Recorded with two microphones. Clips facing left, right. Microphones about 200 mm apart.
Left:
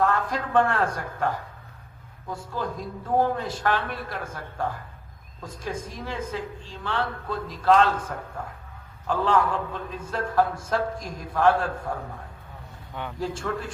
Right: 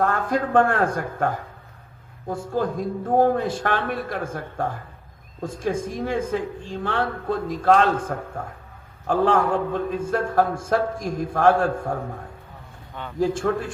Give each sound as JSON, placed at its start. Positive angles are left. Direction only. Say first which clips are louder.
{"t": 0.0, "sound": "a woman's voice", "louder": "right 3 dB", "side_deg": -50}
{"t": 13.1, "sound": "a woman's voice", "louder": "right 9 dB", "side_deg": -50}